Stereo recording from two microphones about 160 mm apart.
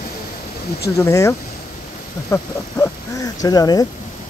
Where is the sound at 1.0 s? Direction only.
20° left (ahead or behind).